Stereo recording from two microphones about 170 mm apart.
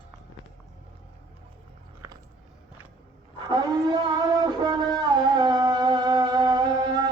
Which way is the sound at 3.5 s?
25° right (ahead or behind).